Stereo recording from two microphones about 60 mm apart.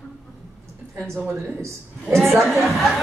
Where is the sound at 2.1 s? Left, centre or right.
Centre.